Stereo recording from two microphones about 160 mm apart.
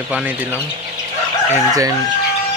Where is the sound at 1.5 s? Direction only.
20° right (ahead or behind).